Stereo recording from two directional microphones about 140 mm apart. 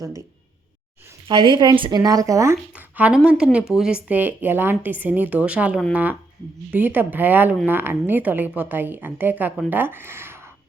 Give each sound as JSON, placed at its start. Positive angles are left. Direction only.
{"t": 1.3, "sound": "speech", "side_deg": -35}
{"t": 2.7, "sound": "a woman's voice", "side_deg": -10}